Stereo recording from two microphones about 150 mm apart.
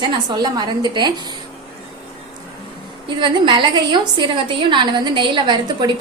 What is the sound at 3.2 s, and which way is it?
A woman's voice, 35° right (ahead or behind).